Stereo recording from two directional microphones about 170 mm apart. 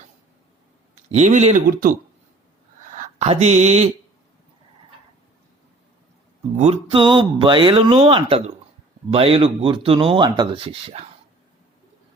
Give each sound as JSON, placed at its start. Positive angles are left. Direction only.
{"t": 1.1, "sound": "speech", "side_deg": -45}
{"t": 2.9, "sound": "speech", "side_deg": -45}
{"t": 6.6, "sound": "speech", "side_deg": -35}